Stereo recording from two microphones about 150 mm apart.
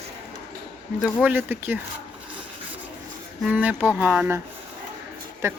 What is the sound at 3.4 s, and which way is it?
A woman's voice, 10° right (ahead or behind).